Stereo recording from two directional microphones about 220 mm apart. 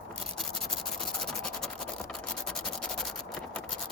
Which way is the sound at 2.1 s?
5° left (ahead or behind).